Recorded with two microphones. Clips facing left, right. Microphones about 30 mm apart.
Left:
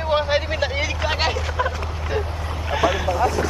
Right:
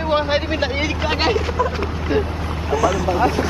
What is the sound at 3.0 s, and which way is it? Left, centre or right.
Speech, right.